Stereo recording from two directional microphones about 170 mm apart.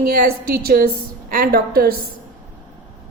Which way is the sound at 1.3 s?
60° right (ahead or behind).